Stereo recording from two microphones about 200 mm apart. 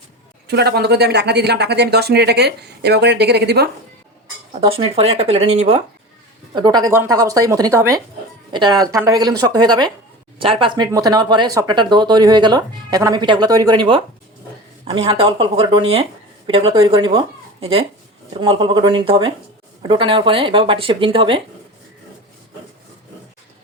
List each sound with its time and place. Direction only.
0.4 s speech: 55° right (ahead or behind)
4.6 s speech: 30° right (ahead or behind)
6.5 s speech: 20° right (ahead or behind)